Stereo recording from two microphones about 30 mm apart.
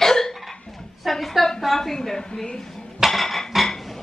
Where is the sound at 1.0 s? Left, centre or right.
Centre.